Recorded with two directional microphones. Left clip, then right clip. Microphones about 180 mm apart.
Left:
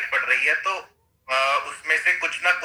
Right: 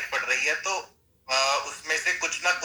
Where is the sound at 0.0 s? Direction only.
15° left (ahead or behind).